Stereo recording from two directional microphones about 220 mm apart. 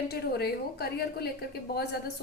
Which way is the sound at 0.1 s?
45° left (ahead or behind).